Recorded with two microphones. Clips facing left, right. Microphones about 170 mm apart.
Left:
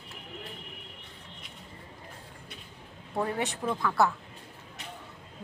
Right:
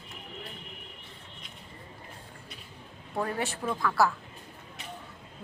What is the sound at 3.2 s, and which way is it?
Speech, 20° left (ahead or behind).